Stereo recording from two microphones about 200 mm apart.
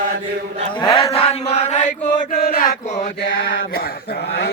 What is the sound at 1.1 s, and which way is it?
Chant, 30° left (ahead or behind).